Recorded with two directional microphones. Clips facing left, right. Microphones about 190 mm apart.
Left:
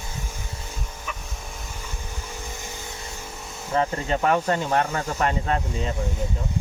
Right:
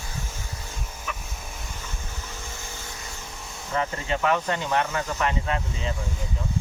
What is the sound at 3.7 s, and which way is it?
Speech, 40° left (ahead or behind).